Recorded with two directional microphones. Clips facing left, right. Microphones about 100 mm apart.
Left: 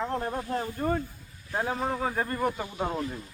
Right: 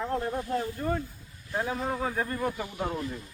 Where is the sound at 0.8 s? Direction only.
45° left (ahead or behind).